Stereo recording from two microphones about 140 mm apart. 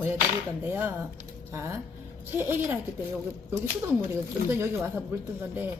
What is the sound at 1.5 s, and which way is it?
A woman's voice, 20° right (ahead or behind).